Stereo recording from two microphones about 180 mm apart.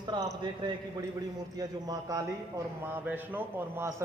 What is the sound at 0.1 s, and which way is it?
A man's voice, 25° right (ahead or behind).